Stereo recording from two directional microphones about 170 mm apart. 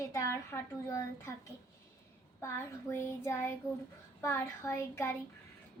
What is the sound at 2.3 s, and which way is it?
A woman's voice, 15° left (ahead or behind).